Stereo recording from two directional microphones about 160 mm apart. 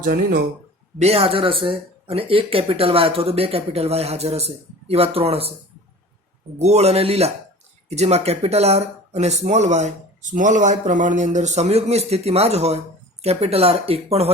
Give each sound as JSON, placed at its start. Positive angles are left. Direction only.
{"t": 0.0, "sound": "speech", "side_deg": -65}
{"t": 0.9, "sound": "speech", "side_deg": -40}
{"t": 6.6, "sound": "speech", "side_deg": -45}